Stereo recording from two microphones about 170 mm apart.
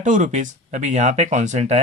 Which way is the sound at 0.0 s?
45° right (ahead or behind).